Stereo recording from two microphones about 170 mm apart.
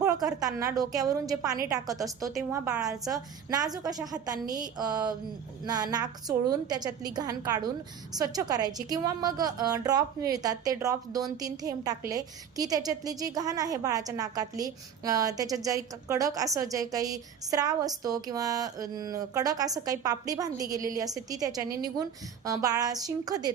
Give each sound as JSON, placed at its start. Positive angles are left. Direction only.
{"t": 0.3, "sound": "a woman's voice", "side_deg": -20}